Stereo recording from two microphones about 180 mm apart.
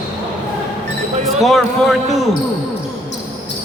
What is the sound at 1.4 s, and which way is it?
Speech, centre (ahead or behind).